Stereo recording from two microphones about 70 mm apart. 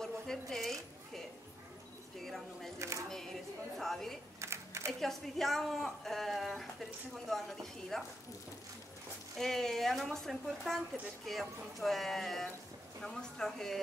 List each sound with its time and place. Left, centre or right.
0.0 s zipper: centre
2.2 s speech: centre
3.7 s speech: centre
4.4 s typing: right
5.0 s speech: centre
9.4 s speech: centre